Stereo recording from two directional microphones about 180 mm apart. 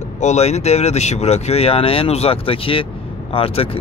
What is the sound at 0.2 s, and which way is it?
Speech, 40° left (ahead or behind).